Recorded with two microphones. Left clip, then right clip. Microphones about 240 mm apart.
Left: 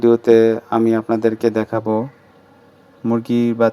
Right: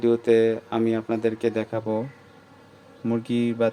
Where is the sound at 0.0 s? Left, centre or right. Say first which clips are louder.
Left 7 dB; left.